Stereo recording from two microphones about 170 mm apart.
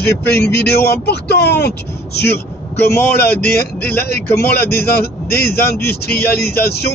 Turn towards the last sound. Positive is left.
turn(degrees=70)  # may be behind; listen again after turning